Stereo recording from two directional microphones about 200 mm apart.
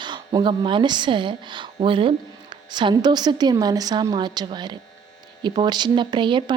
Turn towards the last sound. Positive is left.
turn(degrees=-25)  # may be behind; listen again after turning